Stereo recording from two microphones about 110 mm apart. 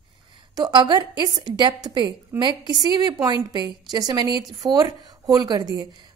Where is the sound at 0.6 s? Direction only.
40° right (ahead or behind).